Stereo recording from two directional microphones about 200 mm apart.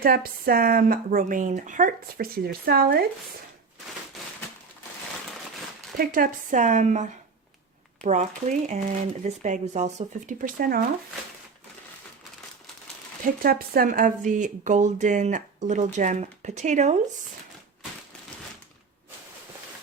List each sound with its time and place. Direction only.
0.0 s speech: 50° right (ahead or behind)
6.0 s speech: 45° right (ahead or behind)
13.4 s speech: 45° right (ahead or behind)